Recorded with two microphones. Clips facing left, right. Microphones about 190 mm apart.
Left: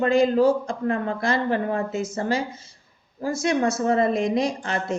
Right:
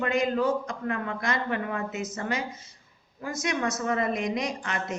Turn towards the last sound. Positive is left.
turn(degrees=30)  # may be behind; listen again after turning